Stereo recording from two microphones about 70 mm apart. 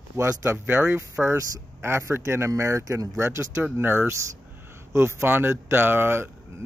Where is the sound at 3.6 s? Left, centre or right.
Right.